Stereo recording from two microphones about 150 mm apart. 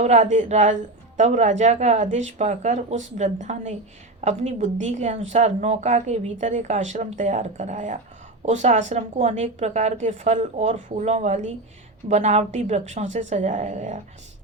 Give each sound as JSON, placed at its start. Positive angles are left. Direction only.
{"t": 0.0, "sound": "a woman's voice", "side_deg": -50}